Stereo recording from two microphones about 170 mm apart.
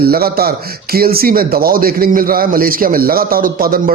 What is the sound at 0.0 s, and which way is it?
Speech, 65° right (ahead or behind).